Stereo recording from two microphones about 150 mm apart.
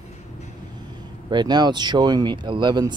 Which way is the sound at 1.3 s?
30° right (ahead or behind).